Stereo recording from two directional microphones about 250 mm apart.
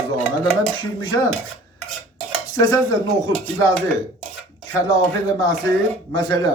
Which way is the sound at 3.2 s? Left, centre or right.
Centre.